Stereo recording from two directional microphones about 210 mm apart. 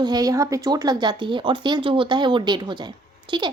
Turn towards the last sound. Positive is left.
turn(degrees=-20)  # may be behind; listen again after turning